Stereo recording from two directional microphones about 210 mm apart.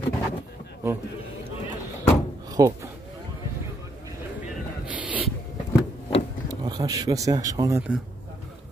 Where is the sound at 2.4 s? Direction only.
15° right (ahead or behind).